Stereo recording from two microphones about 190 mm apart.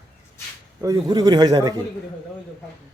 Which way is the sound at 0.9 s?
20° right (ahead or behind).